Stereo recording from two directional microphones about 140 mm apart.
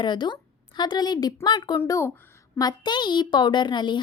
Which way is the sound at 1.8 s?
20° left (ahead or behind).